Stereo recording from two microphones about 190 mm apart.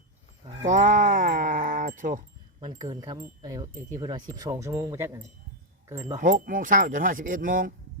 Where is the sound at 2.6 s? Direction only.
25° right (ahead or behind).